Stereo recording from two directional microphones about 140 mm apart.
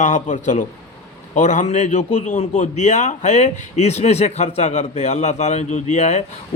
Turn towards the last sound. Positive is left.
turn(degrees=55)  # may be behind; listen again after turning